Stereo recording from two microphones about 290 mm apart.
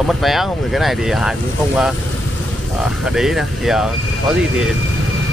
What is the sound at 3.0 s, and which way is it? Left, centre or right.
Speech, centre.